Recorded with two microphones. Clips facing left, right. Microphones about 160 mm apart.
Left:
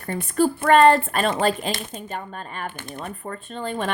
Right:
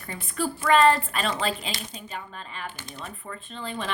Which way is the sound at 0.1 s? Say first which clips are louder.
Left 9 dB; 55° left (ahead or behind).